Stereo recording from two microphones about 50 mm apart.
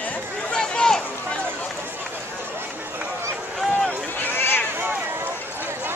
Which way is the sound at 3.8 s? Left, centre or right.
Left.